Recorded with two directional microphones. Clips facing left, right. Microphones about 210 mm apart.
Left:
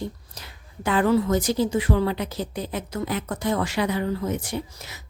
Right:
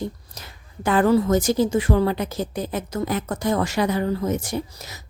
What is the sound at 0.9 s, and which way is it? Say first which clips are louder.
A woman's voice: right 3 dB; 45° right (ahead or behind).